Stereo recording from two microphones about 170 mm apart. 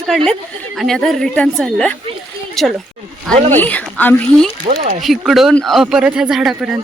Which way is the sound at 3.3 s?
40° right (ahead or behind).